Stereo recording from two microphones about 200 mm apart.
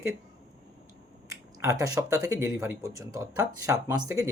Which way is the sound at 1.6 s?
15° right (ahead or behind).